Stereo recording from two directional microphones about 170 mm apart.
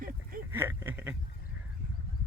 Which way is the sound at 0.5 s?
15° right (ahead or behind).